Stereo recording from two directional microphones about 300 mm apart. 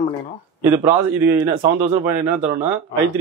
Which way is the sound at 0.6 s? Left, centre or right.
Centre.